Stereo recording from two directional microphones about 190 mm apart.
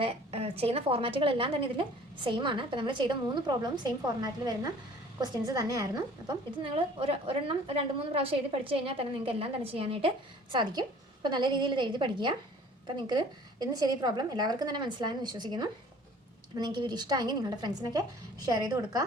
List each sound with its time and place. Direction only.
0.0 s a woman's voice: 30° right (ahead or behind)